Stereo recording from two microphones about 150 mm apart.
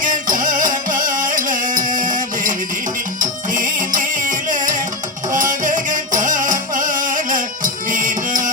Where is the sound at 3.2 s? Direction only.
60° right (ahead or behind).